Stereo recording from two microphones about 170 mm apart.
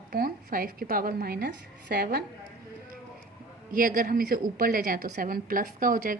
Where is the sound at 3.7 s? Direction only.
55° right (ahead or behind).